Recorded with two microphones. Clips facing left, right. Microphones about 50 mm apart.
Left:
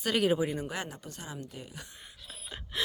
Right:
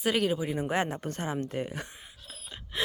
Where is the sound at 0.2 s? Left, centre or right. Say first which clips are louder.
Left 1 dB; centre.